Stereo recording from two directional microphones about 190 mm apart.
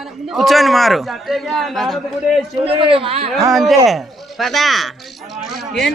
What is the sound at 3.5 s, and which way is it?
A man's voice, centre (ahead or behind).